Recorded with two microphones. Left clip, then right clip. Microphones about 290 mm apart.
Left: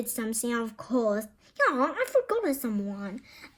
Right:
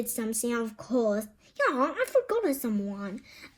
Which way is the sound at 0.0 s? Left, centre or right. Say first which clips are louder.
Right 1 dB; left.